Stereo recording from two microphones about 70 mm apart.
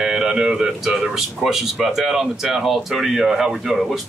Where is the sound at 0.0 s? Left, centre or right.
Centre.